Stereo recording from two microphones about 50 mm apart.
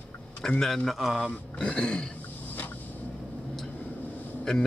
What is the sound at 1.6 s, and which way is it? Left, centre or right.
Speech, centre.